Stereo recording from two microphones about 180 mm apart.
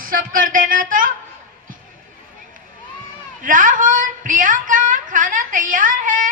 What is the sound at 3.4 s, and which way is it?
A woman's voice, 50° right (ahead or behind).